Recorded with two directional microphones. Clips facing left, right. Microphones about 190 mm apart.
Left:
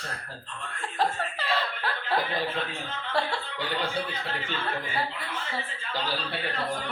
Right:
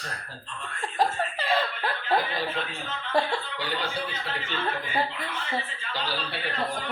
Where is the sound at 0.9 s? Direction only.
15° right (ahead or behind).